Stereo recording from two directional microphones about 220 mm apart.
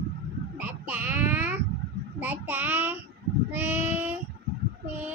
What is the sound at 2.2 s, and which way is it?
Speech, 10° right (ahead or behind).